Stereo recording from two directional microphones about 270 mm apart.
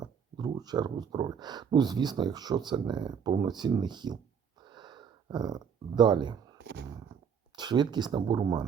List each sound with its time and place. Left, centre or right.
0.0 s speech: centre
4.6 s a sound: centre
7.5 s speech: centre